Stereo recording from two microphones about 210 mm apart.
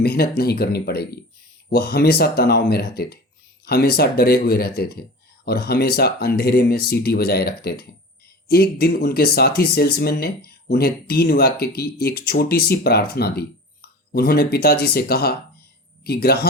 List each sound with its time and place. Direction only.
0.0 s speech: 45° left (ahead or behind)